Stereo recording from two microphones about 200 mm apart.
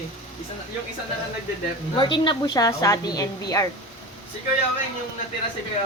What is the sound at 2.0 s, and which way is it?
A woman's voice, 25° left (ahead or behind).